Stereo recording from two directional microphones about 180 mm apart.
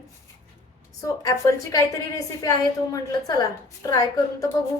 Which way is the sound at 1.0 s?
20° left (ahead or behind).